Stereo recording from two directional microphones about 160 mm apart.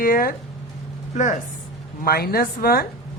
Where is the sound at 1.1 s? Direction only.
50° left (ahead or behind).